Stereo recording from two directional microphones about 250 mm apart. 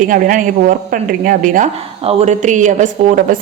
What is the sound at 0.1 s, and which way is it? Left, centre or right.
A woman's voice, right.